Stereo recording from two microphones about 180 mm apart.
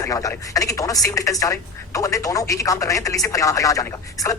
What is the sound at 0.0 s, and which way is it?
Speech, 20° left (ahead or behind).